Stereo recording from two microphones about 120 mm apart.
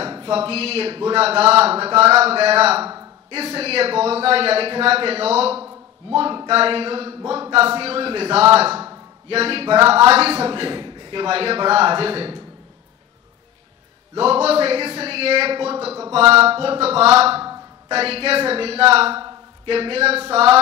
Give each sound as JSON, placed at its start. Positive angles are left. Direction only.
{"t": 0.0, "sound": "a man's voice", "side_deg": -45}
{"t": 6.1, "sound": "a man's voice", "side_deg": -45}
{"t": 14.1, "sound": "a man's voice", "side_deg": -55}